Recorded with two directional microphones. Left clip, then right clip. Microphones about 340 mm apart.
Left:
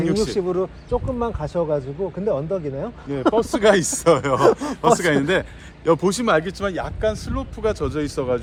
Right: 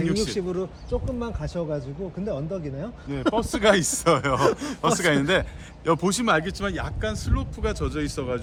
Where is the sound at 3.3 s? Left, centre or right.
Centre.